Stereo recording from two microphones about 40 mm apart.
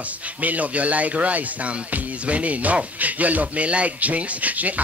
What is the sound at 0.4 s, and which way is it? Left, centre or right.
Speech, right.